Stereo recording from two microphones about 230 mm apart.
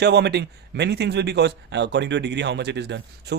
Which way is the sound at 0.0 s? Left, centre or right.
Right.